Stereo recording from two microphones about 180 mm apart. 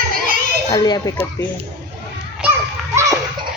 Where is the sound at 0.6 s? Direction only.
25° left (ahead or behind).